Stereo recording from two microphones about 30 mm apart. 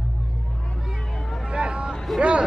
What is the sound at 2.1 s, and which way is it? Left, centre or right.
Vehicle, centre.